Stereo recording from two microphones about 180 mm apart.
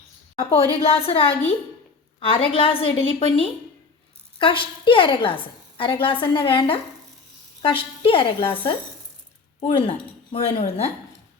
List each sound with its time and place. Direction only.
0.8 s a woman's voice: 30° left (ahead or behind)